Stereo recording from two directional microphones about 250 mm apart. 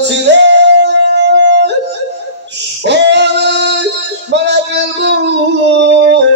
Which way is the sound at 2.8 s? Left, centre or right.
Right.